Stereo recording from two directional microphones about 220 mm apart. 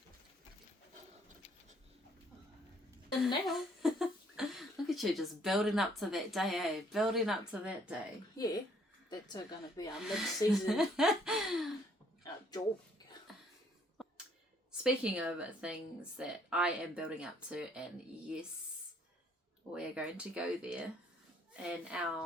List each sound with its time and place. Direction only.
3.4 s speech: centre (ahead or behind)
9.0 s a woman's voice: 20° left (ahead or behind)
10.0 s a woman's voice: centre (ahead or behind)
12.2 s a sound: 15° left (ahead or behind)
13.3 s cough: centre (ahead or behind)
14.7 s a woman's voice: 5° right (ahead or behind)
19.7 s a woman's voice: 5° right (ahead or behind)